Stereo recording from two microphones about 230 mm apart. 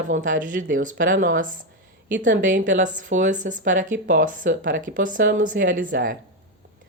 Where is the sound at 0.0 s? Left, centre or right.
Right.